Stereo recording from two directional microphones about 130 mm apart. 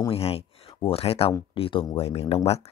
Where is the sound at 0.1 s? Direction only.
50° left (ahead or behind).